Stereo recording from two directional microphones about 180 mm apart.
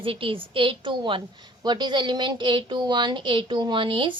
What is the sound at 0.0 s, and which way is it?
A woman's voice, 30° right (ahead or behind).